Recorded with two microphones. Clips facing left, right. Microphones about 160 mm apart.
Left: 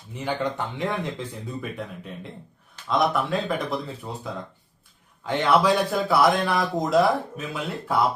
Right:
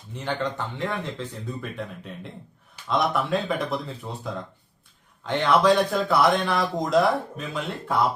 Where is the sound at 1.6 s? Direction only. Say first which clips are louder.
Left 1 dB; centre (ahead or behind).